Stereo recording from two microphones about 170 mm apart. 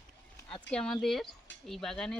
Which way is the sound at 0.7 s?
5° left (ahead or behind).